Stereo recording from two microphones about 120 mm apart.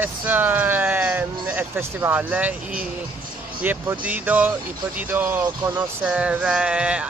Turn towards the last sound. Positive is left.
turn(degrees=-10)  # may be behind; listen again after turning